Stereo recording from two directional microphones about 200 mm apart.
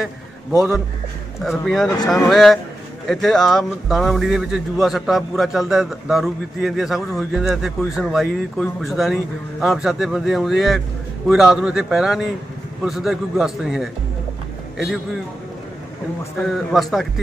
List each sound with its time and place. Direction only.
0.6 s speech: centre (ahead or behind)
16.4 s speech: centre (ahead or behind)